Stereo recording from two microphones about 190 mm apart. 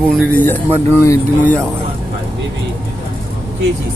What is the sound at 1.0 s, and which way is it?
Speech, 15° left (ahead or behind).